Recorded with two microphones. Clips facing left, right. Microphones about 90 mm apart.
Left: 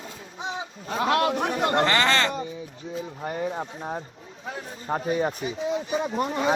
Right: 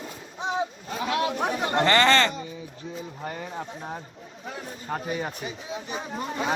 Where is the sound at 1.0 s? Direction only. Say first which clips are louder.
Left 3 dB; 60° left (ahead or behind).